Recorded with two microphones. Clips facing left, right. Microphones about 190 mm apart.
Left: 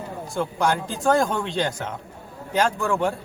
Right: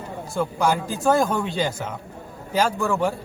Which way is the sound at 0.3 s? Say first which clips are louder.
Right 1 dB; 5° right (ahead or behind).